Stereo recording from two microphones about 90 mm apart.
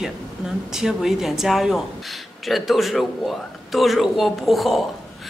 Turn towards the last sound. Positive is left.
turn(degrees=0)  # may be behind; listen again after turning